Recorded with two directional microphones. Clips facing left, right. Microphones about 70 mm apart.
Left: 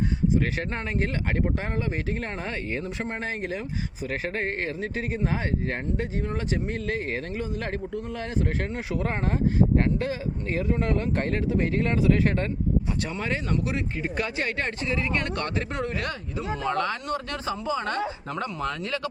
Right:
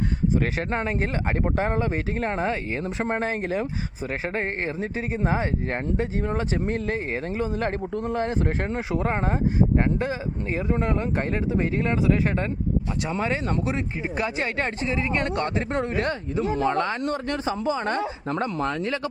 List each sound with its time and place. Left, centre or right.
0.3 s speech: right
4.1 s speech: right